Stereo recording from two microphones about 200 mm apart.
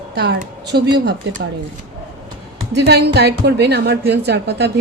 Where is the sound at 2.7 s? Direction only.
55° right (ahead or behind).